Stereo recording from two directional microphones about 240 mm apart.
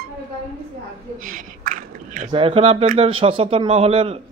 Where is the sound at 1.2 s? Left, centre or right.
Right.